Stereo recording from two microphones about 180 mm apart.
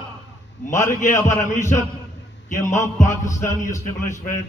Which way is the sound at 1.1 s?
15° left (ahead or behind).